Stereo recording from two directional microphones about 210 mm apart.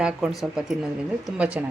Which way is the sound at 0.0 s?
5° right (ahead or behind).